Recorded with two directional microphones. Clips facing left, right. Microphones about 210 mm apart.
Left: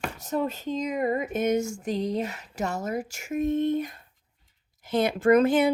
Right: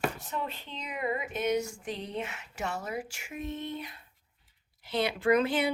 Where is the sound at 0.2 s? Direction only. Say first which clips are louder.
Left 9 dB; 40° left (ahead or behind).